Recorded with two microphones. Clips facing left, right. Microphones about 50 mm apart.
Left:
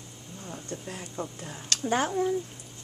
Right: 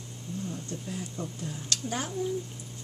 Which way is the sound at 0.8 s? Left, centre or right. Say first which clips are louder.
Right 1 dB; left.